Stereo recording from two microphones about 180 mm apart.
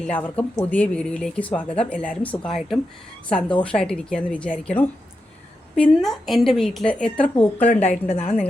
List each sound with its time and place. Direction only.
0.0 s a woman's voice: 5° left (ahead or behind)
7.7 s a woman's voice: 35° left (ahead or behind)